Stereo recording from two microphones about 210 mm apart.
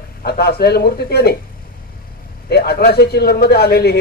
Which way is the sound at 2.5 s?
50° left (ahead or behind).